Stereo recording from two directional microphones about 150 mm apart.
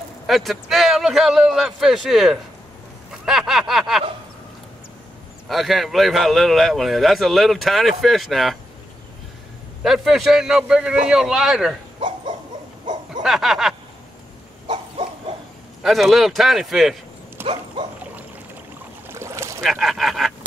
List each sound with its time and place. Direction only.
0.3 s speech: centre (ahead or behind)
3.3 s a sound: 5° right (ahead or behind)
5.5 s speech: centre (ahead or behind)
9.8 s speech: centre (ahead or behind)
13.2 s speech: centre (ahead or behind)
14.7 s dog: 40° right (ahead or behind)
15.8 s speech: centre (ahead or behind)
17.4 s dog: 15° right (ahead or behind)
17.8 s dog: 35° right (ahead or behind)
19.0 s boat: 15° right (ahead or behind)
19.6 s speech: centre (ahead or behind)